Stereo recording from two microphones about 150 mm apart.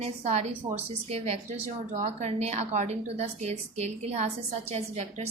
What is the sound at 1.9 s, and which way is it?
A woman's voice, 50° right (ahead or behind).